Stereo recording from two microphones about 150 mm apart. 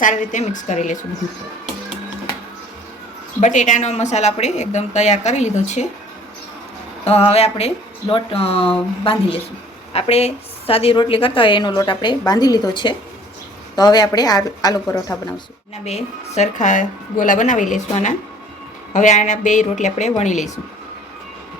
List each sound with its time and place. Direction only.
0.0 s a woman's voice: 55° left (ahead or behind)
3.4 s a woman's voice: 55° left (ahead or behind)
7.0 s a woman's voice: 40° left (ahead or behind); by 15.1 s 25° left (ahead or behind)
15.8 s a woman's voice: 45° left (ahead or behind)